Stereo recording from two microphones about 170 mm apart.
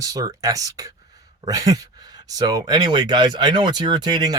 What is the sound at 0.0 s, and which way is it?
Speech, 20° right (ahead or behind).